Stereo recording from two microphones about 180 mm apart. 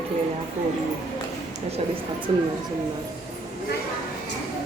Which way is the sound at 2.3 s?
30° right (ahead or behind).